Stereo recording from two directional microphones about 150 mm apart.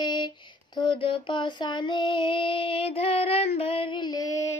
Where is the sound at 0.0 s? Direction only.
30° left (ahead or behind).